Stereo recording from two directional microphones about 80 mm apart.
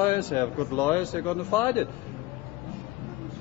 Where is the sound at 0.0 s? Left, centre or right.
Left.